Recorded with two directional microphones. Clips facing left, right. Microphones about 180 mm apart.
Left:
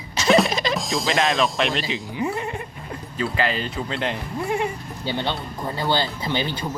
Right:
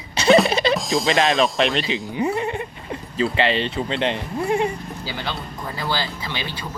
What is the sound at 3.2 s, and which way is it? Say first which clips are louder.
Speech: right 4 dB; 25° right (ahead or behind).